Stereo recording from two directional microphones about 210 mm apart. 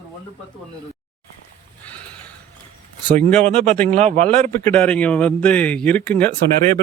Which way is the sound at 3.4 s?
30° right (ahead or behind).